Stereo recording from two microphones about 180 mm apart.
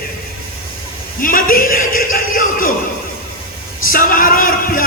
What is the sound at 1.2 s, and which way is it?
A man's voice, 50° left (ahead or behind).